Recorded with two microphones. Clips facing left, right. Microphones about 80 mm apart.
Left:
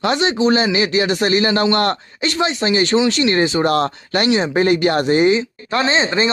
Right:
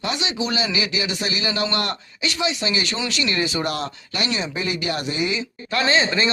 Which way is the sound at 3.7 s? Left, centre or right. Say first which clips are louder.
Left 10 dB; left.